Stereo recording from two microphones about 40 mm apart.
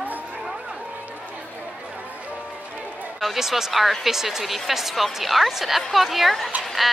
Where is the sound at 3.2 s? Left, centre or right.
Centre.